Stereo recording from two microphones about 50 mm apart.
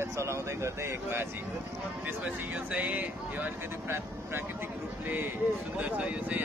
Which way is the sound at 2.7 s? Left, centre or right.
Right.